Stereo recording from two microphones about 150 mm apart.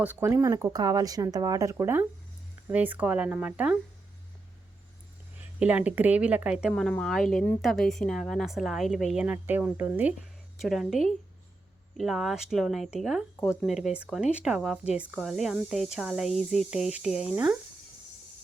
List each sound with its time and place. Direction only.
0.0 s speech: 15° right (ahead or behind)
5.5 s speech: 10° right (ahead or behind)